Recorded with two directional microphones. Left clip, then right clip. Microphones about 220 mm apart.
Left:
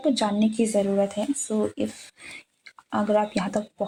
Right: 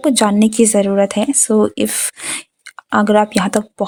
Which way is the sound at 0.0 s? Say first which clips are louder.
Right 10 dB; 40° right (ahead or behind).